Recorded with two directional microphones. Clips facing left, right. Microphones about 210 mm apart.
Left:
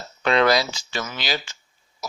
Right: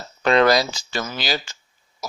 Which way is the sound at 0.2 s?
40° right (ahead or behind).